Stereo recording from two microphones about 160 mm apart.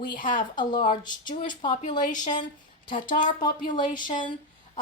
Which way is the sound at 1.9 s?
55° left (ahead or behind).